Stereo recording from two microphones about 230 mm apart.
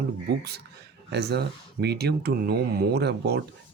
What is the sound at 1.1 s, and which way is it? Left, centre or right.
Speech, right.